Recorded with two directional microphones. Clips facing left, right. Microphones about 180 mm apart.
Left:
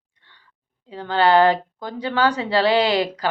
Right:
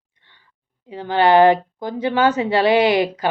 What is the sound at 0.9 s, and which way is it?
A woman's voice, 20° right (ahead or behind).